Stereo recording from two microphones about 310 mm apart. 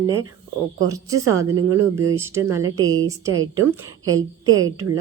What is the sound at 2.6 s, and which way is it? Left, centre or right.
Speech, right.